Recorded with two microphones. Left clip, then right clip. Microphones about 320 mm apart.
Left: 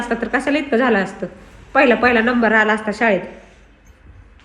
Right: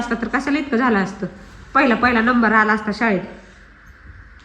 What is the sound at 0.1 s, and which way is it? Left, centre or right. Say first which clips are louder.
A woman's voice: left 4 dB; centre.